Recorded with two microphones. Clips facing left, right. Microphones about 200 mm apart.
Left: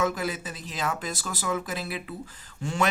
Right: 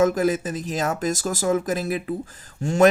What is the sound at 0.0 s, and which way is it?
Speech, 45° right (ahead or behind).